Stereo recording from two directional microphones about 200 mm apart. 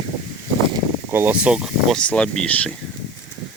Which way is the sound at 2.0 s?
5° left (ahead or behind).